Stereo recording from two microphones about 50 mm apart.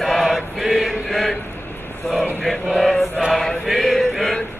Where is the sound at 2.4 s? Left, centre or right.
Centre.